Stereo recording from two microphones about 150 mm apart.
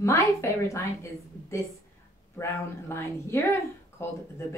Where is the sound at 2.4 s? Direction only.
20° left (ahead or behind).